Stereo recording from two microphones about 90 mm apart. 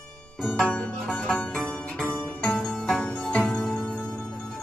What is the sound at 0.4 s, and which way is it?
Music, 5° left (ahead or behind).